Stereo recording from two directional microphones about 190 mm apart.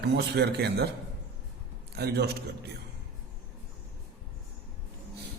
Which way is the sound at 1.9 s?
60° right (ahead or behind).